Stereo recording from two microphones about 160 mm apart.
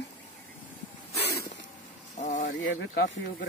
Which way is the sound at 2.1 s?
50° left (ahead or behind).